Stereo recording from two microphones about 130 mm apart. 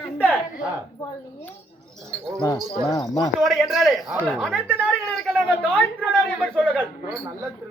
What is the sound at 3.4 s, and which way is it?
Speech, centre (ahead or behind).